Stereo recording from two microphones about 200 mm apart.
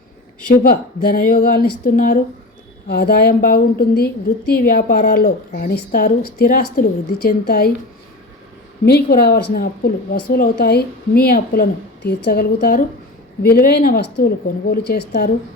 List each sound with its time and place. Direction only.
0.5 s speech: 50° left (ahead or behind)
8.8 s speech: 55° left (ahead or behind)